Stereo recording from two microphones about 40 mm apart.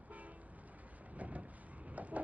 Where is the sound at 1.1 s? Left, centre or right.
Right.